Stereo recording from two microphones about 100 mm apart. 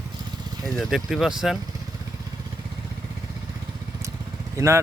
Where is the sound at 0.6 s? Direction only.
Centre (ahead or behind).